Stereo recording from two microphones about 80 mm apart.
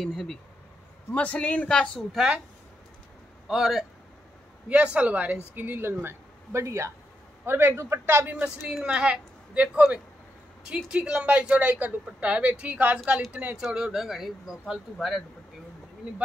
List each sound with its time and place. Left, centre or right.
0.0 s speech: centre
1.1 s a man's voice: centre
3.4 s speech: centre
4.6 s a man's voice: centre; by 8.3 s right
8.3 s speech: centre
13.6 s speech: centre